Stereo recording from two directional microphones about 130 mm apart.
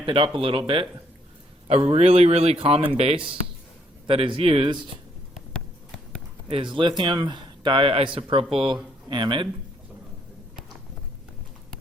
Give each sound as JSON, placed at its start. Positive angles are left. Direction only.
{"t": 0.0, "sound": "speech", "side_deg": -45}
{"t": 1.6, "sound": "speech", "side_deg": -55}
{"t": 6.5, "sound": "speech", "side_deg": -40}